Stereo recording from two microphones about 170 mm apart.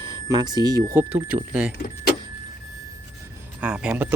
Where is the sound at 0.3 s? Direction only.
25° right (ahead or behind).